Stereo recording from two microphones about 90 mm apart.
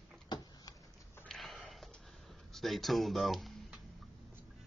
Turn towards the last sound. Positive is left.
turn(degrees=0)  # may be behind; listen again after turning